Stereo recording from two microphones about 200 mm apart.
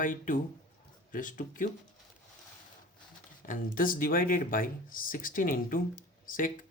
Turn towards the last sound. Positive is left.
turn(degrees=45)  # may be behind; listen again after turning